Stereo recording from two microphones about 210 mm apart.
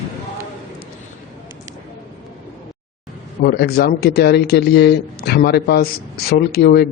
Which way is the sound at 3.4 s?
50° left (ahead or behind).